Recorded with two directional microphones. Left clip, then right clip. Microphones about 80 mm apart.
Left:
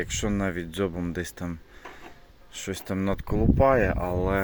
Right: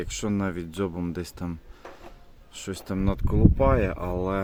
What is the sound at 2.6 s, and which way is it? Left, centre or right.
Speech, centre.